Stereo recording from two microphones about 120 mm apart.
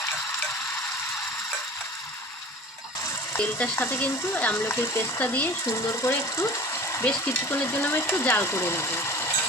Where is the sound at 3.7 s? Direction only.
15° left (ahead or behind).